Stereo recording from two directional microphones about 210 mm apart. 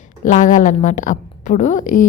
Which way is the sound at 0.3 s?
35° left (ahead or behind).